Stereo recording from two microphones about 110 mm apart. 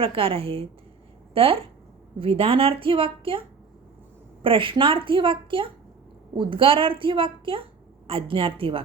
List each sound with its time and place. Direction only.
0.0 s a woman's voice: 55° right (ahead or behind)
4.4 s a woman's voice: 55° right (ahead or behind)